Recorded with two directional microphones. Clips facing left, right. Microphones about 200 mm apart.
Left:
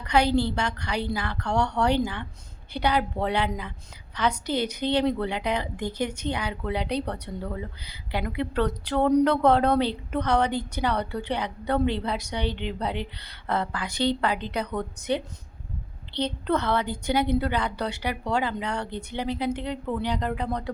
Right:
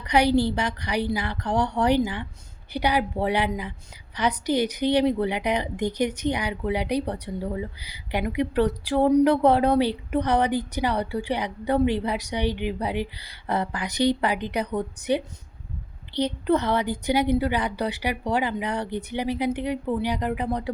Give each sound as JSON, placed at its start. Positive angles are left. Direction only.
{"t": 0.0, "sound": "a woman's voice", "side_deg": -15}